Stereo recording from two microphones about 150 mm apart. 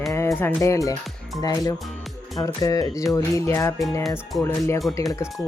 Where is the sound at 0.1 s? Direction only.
20° left (ahead or behind).